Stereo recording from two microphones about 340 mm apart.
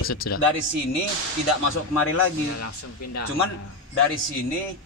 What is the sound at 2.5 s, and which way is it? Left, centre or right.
Speech, left.